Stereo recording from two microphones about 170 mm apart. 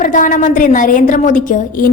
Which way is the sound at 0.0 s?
50° left (ahead or behind).